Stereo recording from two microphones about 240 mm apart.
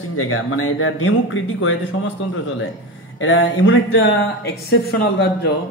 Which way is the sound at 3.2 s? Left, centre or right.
Left.